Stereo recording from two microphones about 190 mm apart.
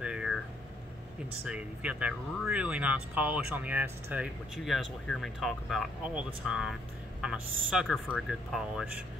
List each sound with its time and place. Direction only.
0.0 s cat: 5° right (ahead or behind)
1.4 s speech: 5° right (ahead or behind)